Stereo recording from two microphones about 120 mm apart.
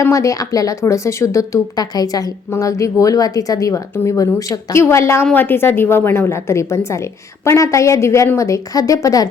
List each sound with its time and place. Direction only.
0.0 s speech: 25° left (ahead or behind)